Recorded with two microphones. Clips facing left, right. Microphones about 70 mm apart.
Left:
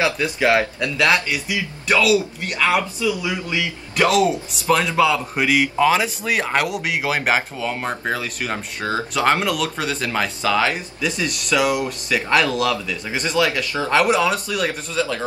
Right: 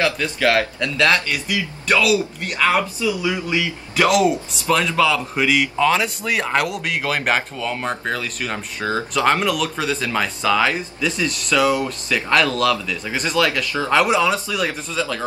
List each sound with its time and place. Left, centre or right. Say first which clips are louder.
0.0 s speech: even; centre
1.9 s a man's voice: left 1 dB; centre
3.2 s speech: right 2 dB; centre
4.2 s a man's voice: right 1 dB; centre